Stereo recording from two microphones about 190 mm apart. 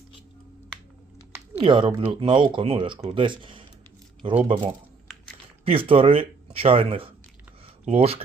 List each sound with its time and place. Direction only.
1.5 s speech: 25° right (ahead or behind)
5.6 s speech: 30° right (ahead or behind)